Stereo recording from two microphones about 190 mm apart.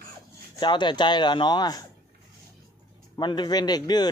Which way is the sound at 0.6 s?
25° left (ahead or behind).